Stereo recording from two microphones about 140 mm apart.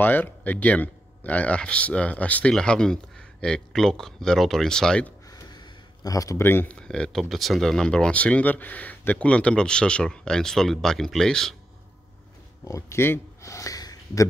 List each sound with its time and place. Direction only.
0.0 s speech: 15° left (ahead or behind)
5.3 s speech: 30° left (ahead or behind); by 11.5 s 5° left (ahead or behind)
12.6 s a sound: 20° left (ahead or behind)